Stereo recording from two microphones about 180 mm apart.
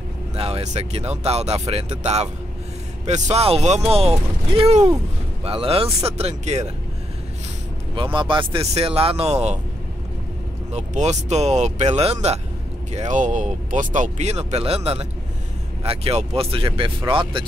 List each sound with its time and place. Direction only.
0.4 s speech: 35° right (ahead or behind)
7.9 s speech: 30° right (ahead or behind)
10.7 s speech: 40° right (ahead or behind)